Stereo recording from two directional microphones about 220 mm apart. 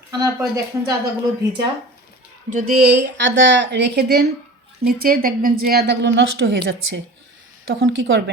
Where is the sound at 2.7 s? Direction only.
90° right; by 6.5 s 55° right (ahead or behind).